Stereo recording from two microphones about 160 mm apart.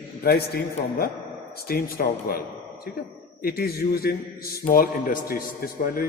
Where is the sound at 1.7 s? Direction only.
70° left (ahead or behind).